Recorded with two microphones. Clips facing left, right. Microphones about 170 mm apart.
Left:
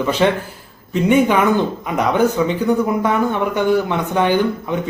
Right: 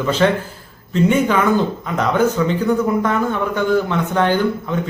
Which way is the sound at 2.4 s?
15° left (ahead or behind).